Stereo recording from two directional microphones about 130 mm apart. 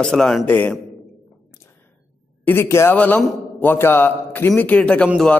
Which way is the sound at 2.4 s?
20° left (ahead or behind).